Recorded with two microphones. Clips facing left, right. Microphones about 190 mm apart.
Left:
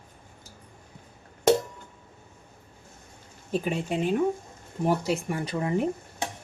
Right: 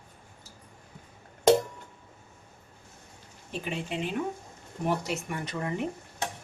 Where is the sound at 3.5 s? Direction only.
40° left (ahead or behind).